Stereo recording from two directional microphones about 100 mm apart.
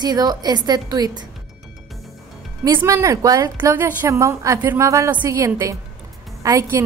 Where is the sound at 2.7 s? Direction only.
25° right (ahead or behind).